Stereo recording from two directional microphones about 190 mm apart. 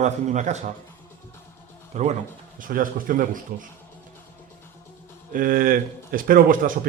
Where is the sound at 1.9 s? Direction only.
35° right (ahead or behind).